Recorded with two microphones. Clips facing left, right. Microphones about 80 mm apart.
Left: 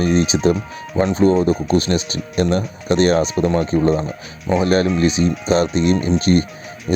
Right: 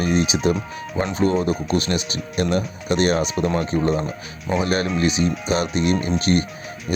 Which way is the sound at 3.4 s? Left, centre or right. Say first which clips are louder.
Left 4 dB; centre.